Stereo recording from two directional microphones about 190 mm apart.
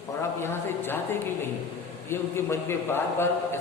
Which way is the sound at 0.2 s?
15° left (ahead or behind).